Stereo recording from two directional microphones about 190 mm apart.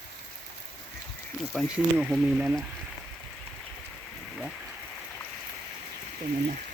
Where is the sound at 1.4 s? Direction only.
Centre (ahead or behind).